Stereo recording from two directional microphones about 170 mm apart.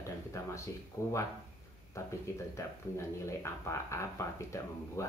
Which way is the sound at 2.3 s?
15° left (ahead or behind).